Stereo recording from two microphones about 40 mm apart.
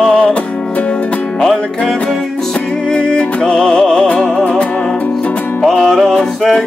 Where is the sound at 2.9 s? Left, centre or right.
Left.